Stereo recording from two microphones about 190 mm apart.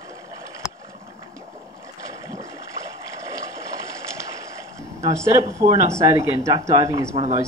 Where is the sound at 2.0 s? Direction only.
15° right (ahead or behind).